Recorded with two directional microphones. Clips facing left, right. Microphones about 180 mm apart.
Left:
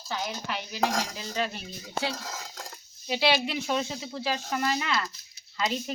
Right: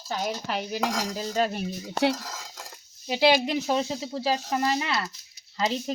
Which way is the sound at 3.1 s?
45° right (ahead or behind).